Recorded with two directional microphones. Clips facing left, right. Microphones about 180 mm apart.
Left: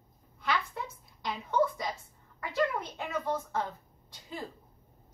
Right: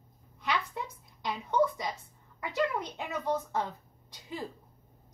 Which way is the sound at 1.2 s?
20° right (ahead or behind).